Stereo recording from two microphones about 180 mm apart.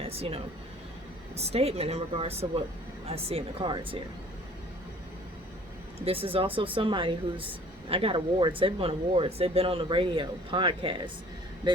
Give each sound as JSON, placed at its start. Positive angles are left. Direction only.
{"t": 0.0, "sound": "speech", "side_deg": -35}
{"t": 6.1, "sound": "a woman's voice", "side_deg": -30}